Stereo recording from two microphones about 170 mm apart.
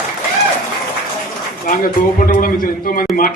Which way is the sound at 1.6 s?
50° left (ahead or behind).